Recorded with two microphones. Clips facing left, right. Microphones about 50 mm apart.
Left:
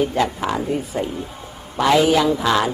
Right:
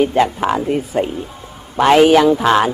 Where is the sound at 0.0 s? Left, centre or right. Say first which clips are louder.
Right 5 dB; right.